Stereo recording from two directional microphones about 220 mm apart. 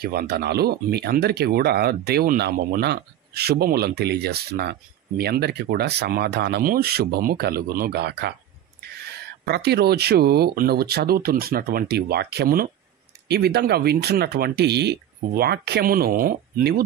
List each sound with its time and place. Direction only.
0.0 s speech: 45° right (ahead or behind)
9.4 s speech: 50° right (ahead or behind)